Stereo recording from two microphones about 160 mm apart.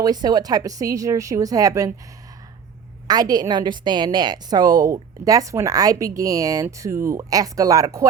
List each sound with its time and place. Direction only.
0.0 s a woman's voice: 25° right (ahead or behind)
3.1 s a woman's voice: 25° right (ahead or behind)